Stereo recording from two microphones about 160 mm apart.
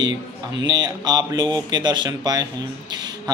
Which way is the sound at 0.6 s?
25° right (ahead or behind).